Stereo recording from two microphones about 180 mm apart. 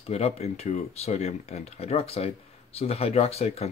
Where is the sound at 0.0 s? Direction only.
35° left (ahead or behind).